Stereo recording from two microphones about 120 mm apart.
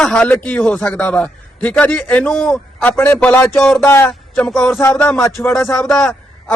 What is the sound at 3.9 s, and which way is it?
Speech, 20° left (ahead or behind).